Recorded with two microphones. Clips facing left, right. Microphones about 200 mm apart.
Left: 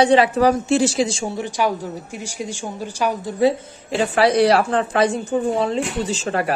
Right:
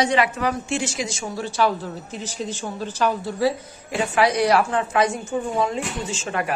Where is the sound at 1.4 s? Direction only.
15° left (ahead or behind).